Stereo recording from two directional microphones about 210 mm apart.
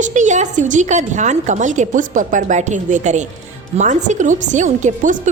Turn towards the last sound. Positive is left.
turn(degrees=-35)  # may be behind; listen again after turning